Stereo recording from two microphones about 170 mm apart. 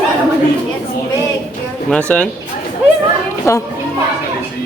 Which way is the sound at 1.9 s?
5° left (ahead or behind).